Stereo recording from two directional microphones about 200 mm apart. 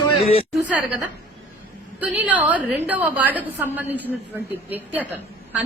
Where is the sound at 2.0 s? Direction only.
10° right (ahead or behind).